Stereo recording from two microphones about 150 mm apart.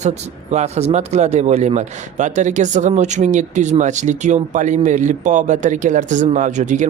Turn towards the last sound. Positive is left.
turn(degrees=-55)  # may be behind; listen again after turning